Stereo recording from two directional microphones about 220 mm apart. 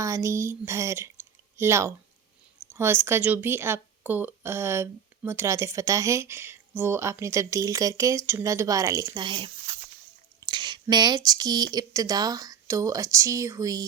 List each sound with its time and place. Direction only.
0.0 s speech: 15° right (ahead or behind)